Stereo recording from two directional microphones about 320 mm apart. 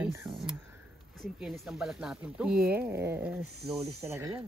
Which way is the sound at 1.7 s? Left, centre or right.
Centre.